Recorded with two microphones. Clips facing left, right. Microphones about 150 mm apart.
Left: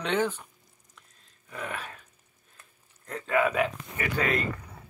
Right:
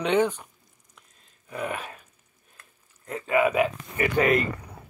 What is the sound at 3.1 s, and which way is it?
Speech, 10° right (ahead or behind).